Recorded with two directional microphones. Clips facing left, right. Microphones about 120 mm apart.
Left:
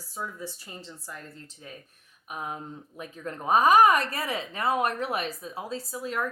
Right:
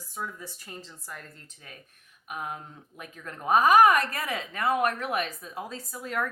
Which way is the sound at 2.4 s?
30° left (ahead or behind).